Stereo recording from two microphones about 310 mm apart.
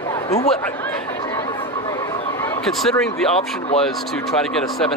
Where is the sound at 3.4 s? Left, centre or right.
Centre.